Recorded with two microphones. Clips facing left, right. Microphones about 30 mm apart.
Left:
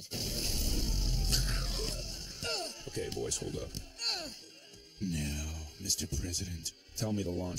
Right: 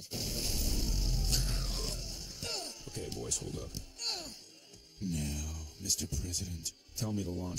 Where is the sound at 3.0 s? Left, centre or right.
Left.